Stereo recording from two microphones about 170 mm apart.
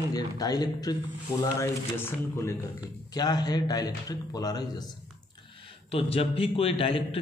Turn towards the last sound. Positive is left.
turn(degrees=35)  # may be behind; listen again after turning